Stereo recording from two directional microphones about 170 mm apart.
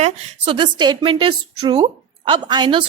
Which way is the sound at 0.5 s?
25° right (ahead or behind).